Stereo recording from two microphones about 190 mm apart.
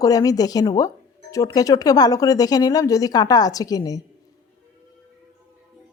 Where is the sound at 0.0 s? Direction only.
20° left (ahead or behind).